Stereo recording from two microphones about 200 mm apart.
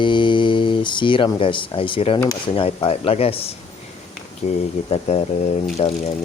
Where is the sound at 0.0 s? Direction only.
25° left (ahead or behind).